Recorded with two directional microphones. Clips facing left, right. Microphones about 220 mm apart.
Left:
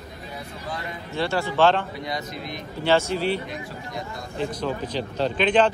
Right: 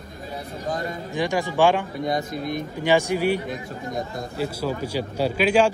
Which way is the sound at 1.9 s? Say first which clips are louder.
Right 6 dB; 50° right (ahead or behind).